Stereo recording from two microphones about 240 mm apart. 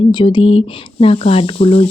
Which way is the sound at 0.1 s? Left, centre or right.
Centre.